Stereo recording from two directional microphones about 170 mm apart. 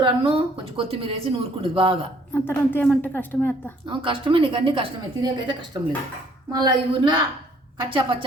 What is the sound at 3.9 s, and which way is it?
A woman's voice, 30° right (ahead or behind).